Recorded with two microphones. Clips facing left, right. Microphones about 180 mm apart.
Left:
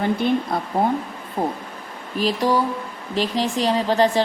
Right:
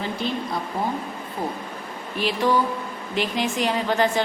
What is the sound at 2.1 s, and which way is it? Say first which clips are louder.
A woman's voice: left 2 dB; 40° left (ahead or behind).